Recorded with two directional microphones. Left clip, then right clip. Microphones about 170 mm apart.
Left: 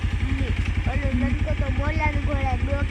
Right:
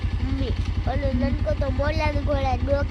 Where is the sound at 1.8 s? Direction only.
75° right (ahead or behind).